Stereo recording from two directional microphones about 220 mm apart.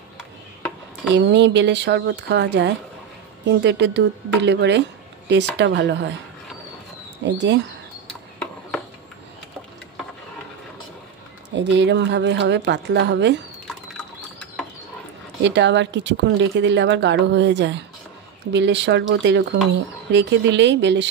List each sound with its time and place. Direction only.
1.1 s a woman's voice: 55° right (ahead or behind)
7.2 s a woman's voice: 55° right (ahead or behind)
11.5 s a woman's voice: 55° right (ahead or behind)
15.4 s a woman's voice: 55° right (ahead or behind)